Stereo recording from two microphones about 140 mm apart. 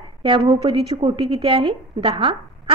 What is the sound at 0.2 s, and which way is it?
A woman's voice, 35° right (ahead or behind).